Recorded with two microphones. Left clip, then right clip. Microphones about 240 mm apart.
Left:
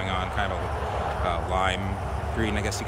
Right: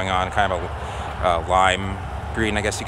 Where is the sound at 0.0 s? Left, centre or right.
Centre.